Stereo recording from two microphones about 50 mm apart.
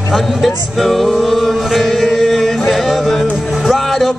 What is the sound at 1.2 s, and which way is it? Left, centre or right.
Chant, centre.